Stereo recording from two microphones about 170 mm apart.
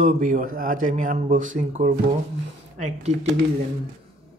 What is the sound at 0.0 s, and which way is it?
A man's voice, 55° right (ahead or behind).